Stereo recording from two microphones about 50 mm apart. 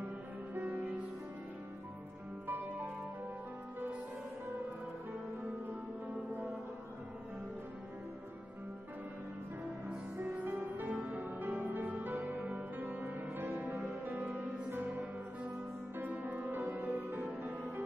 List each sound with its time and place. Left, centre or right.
2.4 s music: right
5.7 s music: right
10.1 s music: right